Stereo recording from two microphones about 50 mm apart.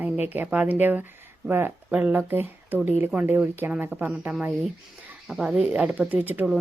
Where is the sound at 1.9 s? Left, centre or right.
Right.